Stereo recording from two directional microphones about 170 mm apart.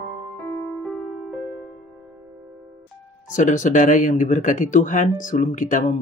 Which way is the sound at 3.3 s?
50° left (ahead or behind).